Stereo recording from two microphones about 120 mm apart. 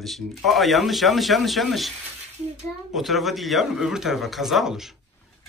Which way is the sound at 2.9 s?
Centre (ahead or behind).